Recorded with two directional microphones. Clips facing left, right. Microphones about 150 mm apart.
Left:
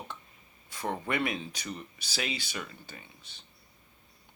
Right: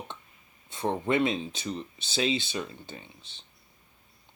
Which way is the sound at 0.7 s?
25° right (ahead or behind).